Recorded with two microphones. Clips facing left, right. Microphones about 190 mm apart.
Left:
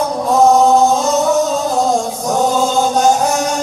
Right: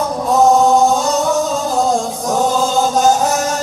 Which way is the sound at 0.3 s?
Centre (ahead or behind).